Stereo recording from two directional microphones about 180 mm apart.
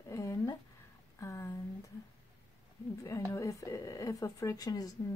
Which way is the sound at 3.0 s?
15° left (ahead or behind).